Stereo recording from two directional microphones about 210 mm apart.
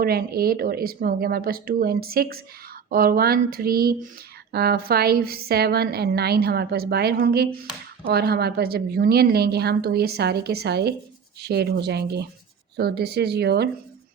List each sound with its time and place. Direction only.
0.0 s a woman's voice: 45° right (ahead or behind)